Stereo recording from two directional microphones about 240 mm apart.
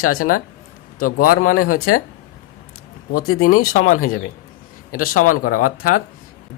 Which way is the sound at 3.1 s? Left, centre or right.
Left.